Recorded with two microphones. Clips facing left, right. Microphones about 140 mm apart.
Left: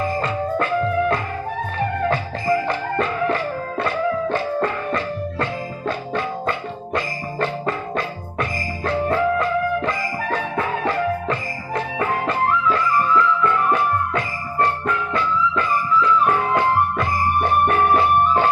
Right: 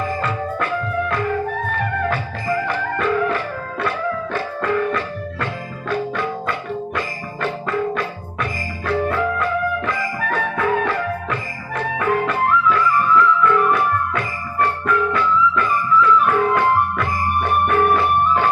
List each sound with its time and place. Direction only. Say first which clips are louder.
0.2 s music: left 1 dB; 35° left (ahead or behind)